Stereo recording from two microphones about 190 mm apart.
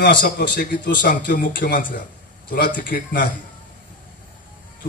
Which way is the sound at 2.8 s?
45° left (ahead or behind).